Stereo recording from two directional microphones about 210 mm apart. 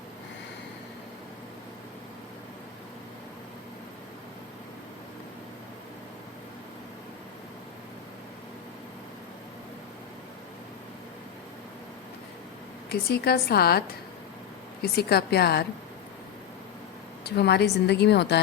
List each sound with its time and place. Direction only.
12.9 s a woman's voice: 50° left (ahead or behind)
17.2 s a woman's voice: 50° left (ahead or behind)